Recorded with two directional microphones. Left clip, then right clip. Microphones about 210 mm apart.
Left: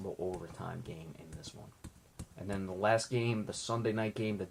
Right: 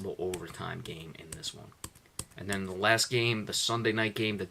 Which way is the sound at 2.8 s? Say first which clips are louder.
Right 4 dB; 10° right (ahead or behind).